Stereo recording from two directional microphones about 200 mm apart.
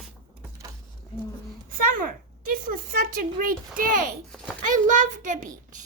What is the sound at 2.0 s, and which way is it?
Speech, 45° right (ahead or behind).